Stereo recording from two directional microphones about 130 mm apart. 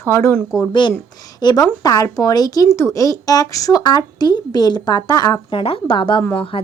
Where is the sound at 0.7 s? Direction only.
35° left (ahead or behind).